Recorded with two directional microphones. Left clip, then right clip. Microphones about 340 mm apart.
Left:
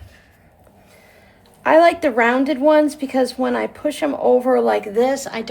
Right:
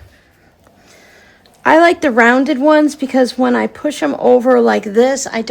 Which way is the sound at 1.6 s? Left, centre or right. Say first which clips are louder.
Right 3 dB; right.